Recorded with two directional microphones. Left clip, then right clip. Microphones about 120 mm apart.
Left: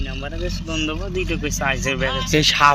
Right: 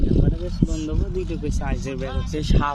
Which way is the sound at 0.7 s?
30° right (ahead or behind).